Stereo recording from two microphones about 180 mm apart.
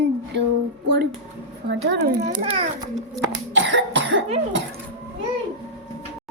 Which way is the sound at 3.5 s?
90° right.